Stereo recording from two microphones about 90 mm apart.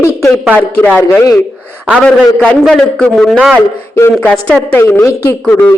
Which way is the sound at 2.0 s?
15° left (ahead or behind).